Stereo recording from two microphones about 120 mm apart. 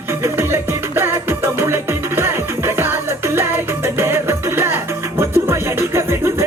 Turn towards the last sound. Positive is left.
turn(degrees=-20)  # may be behind; listen again after turning